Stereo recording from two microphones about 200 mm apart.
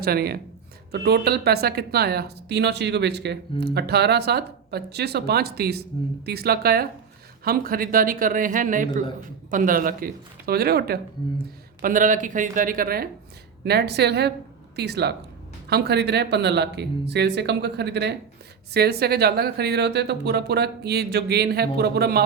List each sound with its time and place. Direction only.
0.0 s speech: 50° right (ahead or behind)